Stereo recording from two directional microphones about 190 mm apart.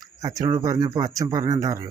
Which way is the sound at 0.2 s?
15° right (ahead or behind).